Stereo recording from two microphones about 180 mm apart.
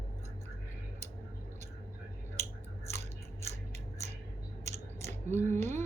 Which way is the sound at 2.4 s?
40° right (ahead or behind).